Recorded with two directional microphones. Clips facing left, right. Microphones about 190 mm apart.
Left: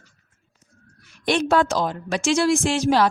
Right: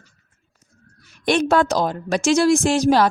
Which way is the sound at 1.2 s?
45° right (ahead or behind).